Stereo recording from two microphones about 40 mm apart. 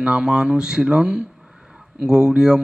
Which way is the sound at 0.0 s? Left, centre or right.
Right.